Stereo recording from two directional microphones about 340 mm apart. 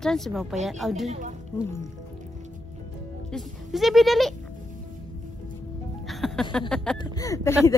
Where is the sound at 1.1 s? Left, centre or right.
Right.